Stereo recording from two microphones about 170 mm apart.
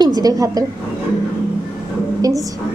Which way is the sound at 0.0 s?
20° right (ahead or behind).